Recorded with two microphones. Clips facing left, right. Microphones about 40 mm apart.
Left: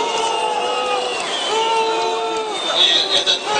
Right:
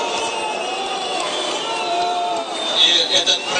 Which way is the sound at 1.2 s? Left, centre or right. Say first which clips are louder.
Left 1 dB; left.